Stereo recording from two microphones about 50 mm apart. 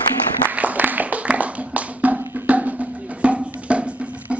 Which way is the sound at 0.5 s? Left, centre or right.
Right.